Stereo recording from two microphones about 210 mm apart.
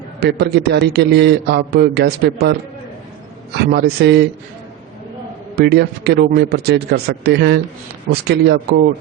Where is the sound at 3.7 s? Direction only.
50° right (ahead or behind).